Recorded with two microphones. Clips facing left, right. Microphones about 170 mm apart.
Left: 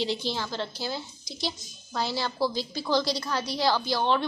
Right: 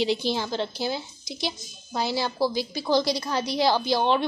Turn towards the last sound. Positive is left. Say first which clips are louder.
# right 3 dB
turn(degrees=-15)  # may be behind; listen again after turning